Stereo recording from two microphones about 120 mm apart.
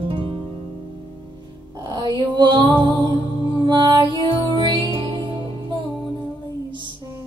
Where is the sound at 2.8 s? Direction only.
40° right (ahead or behind).